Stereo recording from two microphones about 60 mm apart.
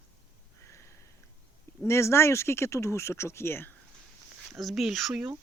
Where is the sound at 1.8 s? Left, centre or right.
Left.